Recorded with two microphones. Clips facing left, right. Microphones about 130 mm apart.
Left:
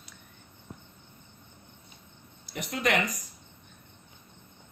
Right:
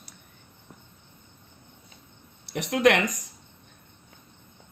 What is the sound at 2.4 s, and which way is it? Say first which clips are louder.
Speech: right 9 dB; 70° right (ahead or behind).